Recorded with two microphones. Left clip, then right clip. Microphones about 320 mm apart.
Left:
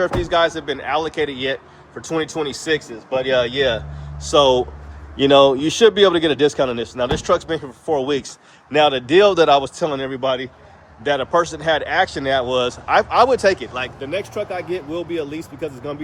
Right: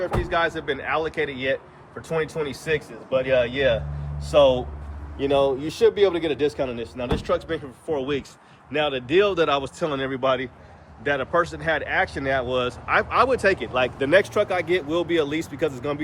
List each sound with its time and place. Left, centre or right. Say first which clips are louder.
0.0 s speech: left 6 dB; centre